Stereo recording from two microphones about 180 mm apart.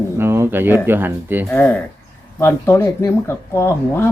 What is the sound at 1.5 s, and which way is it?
Speech, 10° left (ahead or behind).